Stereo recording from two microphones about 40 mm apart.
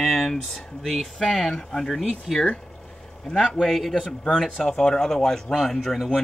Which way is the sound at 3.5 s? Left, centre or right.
Centre.